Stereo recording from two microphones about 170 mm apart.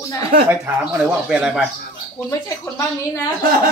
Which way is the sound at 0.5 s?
5° right (ahead or behind).